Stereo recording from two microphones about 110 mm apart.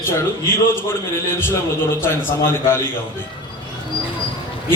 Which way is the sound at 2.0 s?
20° left (ahead or behind).